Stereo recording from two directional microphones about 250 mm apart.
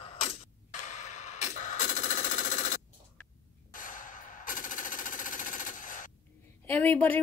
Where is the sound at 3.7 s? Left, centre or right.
Left.